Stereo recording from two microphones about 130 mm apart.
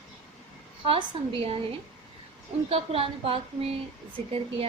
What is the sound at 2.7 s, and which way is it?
A woman's voice, 45° right (ahead or behind).